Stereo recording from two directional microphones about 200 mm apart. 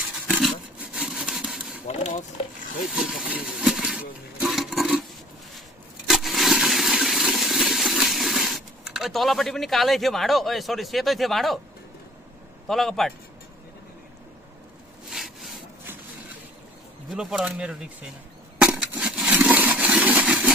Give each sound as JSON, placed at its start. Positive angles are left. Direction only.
{"t": 0.1, "sound": "a sound", "side_deg": -5}
{"t": 1.9, "sound": "speech", "side_deg": 35}
{"t": 2.9, "sound": "speech", "side_deg": -5}
{"t": 4.4, "sound": "a sound", "side_deg": 0}
{"t": 6.0, "sound": "toilet flush", "side_deg": 0}
{"t": 12.6, "sound": "speech", "side_deg": 0}
{"t": 15.0, "sound": "wood", "side_deg": 0}
{"t": 17.1, "sound": "speech", "side_deg": 0}
{"t": 18.6, "sound": "a sound", "side_deg": -5}